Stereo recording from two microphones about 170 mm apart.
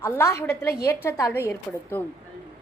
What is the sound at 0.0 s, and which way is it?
A woman's voice, 15° left (ahead or behind).